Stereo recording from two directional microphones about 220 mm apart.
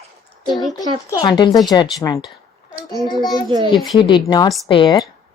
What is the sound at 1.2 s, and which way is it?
Speech, 20° left (ahead or behind).